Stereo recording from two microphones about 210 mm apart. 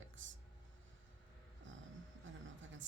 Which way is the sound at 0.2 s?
65° right (ahead or behind).